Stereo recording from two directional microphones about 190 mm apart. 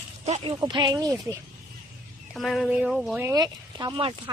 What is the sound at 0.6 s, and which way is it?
Speech, 20° right (ahead or behind).